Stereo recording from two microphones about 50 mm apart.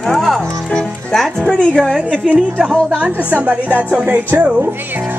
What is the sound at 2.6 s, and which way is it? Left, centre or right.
Speech, centre.